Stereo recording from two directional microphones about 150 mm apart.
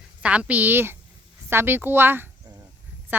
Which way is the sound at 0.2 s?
10° right (ahead or behind).